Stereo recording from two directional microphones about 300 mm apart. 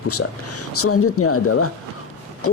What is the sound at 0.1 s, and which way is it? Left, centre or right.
Speech, left.